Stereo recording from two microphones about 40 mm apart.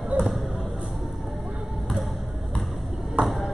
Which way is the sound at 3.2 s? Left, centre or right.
Right.